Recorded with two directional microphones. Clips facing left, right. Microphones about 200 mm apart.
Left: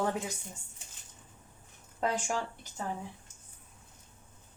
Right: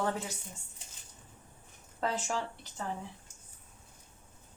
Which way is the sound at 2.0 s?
15° left (ahead or behind).